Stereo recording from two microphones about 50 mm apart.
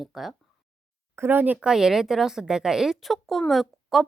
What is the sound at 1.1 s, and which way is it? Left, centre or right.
Speech, right.